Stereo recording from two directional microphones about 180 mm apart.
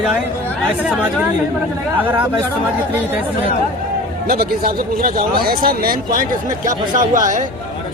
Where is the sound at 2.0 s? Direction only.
10° right (ahead or behind).